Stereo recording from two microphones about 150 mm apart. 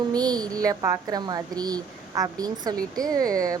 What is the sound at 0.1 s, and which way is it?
Speech, 25° right (ahead or behind).